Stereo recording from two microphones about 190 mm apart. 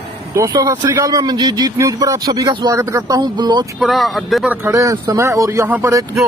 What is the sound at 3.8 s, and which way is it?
Speech, centre (ahead or behind).